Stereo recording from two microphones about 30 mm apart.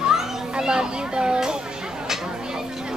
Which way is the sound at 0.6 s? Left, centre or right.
Right.